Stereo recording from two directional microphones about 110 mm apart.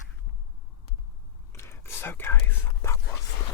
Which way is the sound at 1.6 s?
25° left (ahead or behind).